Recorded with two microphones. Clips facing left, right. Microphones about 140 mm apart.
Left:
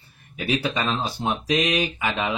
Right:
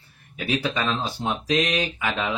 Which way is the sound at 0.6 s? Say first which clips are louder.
Even; 15° left (ahead or behind).